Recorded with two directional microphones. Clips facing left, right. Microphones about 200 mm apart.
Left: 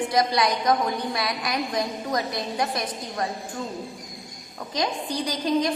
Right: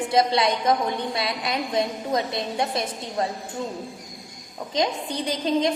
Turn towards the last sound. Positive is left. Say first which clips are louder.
# right 1 dB
turn(degrees=-25)  # may be behind; listen again after turning